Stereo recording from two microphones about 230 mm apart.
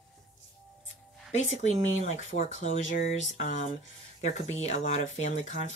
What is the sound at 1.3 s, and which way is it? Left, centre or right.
Speech, left.